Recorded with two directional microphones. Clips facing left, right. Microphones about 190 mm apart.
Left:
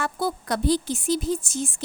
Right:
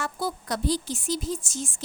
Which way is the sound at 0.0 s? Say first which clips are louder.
Left 4 dB; 60° left (ahead or behind).